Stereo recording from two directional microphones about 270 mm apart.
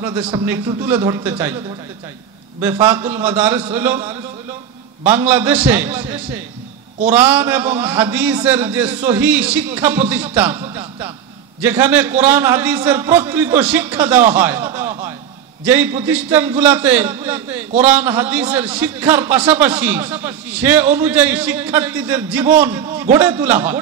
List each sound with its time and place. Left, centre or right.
0.0 s a man's voice: centre
2.6 s a man's voice: centre